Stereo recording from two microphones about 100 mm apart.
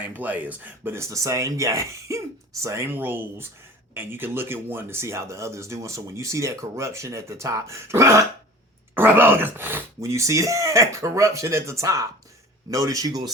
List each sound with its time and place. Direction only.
0.0 s speech: 15° right (ahead or behind); by 13.3 s 40° right (ahead or behind)